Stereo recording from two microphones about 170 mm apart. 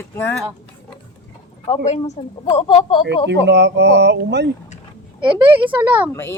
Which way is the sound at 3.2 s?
90° right.